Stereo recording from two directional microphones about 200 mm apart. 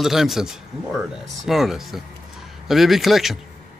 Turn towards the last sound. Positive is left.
turn(degrees=0)  # may be behind; listen again after turning